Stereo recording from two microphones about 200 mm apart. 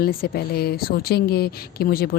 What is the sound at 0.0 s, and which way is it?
Speech, 50° left (ahead or behind).